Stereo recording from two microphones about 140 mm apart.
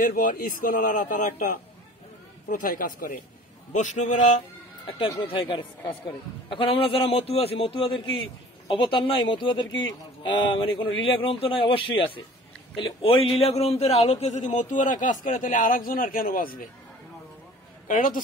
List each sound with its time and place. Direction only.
0.0 s a man's voice: 70° left (ahead or behind)
3.7 s a man's voice: 60° left (ahead or behind)
4.8 s speech: 40° left (ahead or behind)
13.4 s a man's voice: 45° left (ahead or behind); by 16.6 s 90° left
17.8 s a man's voice: 70° left (ahead or behind)